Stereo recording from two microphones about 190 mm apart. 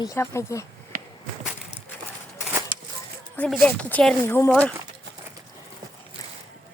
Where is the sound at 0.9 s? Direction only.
50° right (ahead or behind).